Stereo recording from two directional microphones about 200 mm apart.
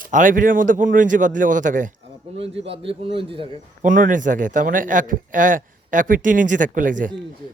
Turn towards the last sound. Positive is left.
turn(degrees=-40)  # may be behind; listen again after turning